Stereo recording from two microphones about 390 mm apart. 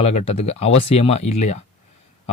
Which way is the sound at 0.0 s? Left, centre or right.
Centre.